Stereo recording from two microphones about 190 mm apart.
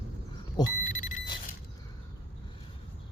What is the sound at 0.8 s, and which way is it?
Alarm clock, 40° left (ahead or behind).